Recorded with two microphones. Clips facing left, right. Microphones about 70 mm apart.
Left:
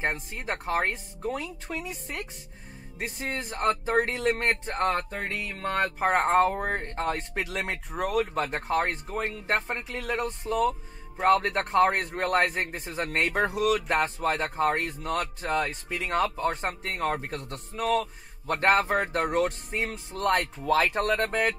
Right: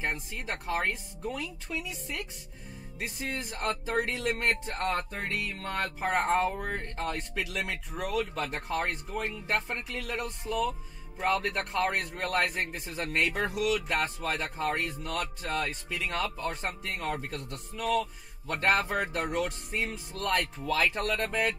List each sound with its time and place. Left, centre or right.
0.0 s speech: left
6.8 s speech: left
8.7 s speech: left